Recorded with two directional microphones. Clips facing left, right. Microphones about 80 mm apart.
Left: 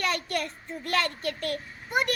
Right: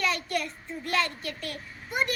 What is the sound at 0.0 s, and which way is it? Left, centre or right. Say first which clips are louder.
Child singing: even; left.